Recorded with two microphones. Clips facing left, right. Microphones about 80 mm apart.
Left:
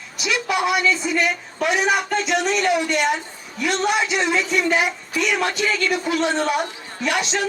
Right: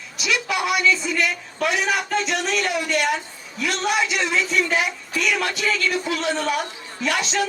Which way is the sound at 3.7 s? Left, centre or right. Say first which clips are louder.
Left 2 dB; left.